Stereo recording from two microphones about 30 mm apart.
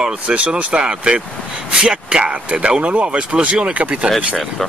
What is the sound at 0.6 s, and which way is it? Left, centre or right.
Speech, right.